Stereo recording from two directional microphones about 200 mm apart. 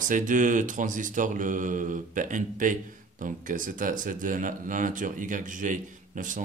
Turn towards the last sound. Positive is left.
turn(degrees=-40)  # may be behind; listen again after turning